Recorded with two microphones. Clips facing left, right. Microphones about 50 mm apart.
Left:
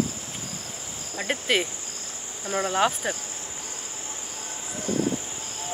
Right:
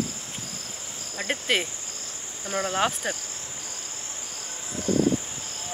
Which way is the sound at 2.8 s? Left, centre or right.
Centre.